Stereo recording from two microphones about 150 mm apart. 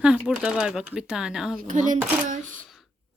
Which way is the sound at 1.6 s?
60° right (ahead or behind).